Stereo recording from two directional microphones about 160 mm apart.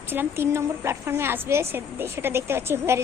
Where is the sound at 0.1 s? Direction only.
15° right (ahead or behind).